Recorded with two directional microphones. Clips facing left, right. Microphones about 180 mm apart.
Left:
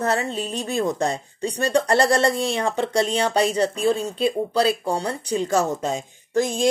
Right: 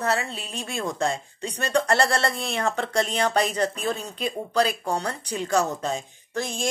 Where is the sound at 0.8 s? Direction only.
20° left (ahead or behind).